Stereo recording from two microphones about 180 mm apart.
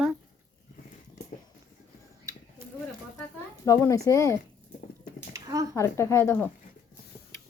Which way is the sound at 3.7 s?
20° left (ahead or behind).